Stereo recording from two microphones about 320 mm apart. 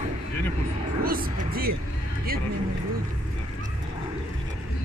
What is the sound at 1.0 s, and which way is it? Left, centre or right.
Speech, right.